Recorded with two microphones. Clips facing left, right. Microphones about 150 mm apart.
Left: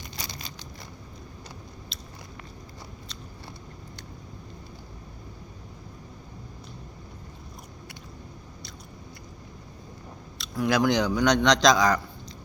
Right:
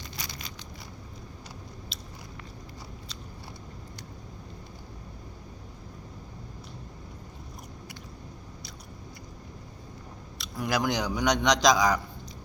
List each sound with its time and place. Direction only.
0.2 s a sound: 30° left (ahead or behind)
1.9 s biting: 10° right (ahead or behind)
10.3 s a man's voice: 10° right (ahead or behind)